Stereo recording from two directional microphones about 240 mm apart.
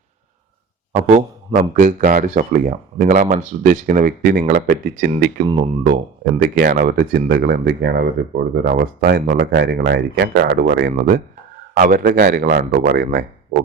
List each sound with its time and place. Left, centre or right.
1.5 s speech: right